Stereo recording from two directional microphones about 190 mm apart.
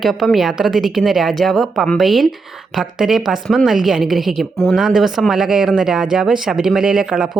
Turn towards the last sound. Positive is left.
turn(degrees=-5)  # may be behind; listen again after turning